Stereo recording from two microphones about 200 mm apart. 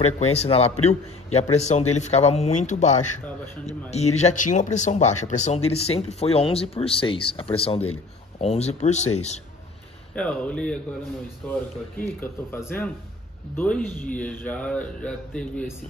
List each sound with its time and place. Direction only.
0.0 s a man's voice: 35° left (ahead or behind)
10.1 s speech: 5° left (ahead or behind)